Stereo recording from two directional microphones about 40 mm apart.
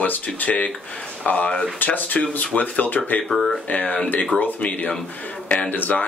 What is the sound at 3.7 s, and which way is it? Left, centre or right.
Speech, left.